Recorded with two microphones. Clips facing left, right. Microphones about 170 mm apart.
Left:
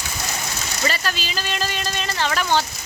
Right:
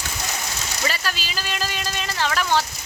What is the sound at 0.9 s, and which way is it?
Speech, 5° right (ahead or behind).